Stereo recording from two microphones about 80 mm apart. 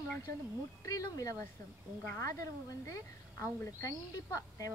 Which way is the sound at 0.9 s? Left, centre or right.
Left.